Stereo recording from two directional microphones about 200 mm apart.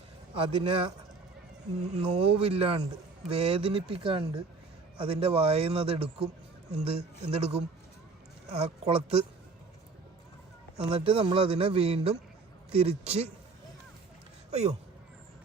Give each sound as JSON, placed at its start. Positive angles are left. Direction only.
{"t": 0.3, "sound": "a man's voice", "side_deg": -30}
{"t": 10.8, "sound": "a man's voice", "side_deg": -30}